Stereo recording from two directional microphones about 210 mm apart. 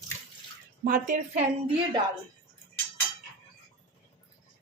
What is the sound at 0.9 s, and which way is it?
Speech, 40° right (ahead or behind).